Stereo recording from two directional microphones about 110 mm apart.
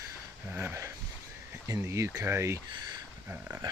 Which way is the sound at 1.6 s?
30° right (ahead or behind).